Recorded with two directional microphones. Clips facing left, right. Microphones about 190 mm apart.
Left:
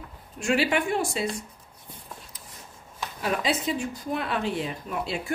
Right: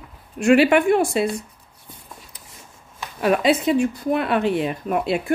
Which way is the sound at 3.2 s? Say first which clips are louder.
Right 9 dB; 65° right (ahead or behind).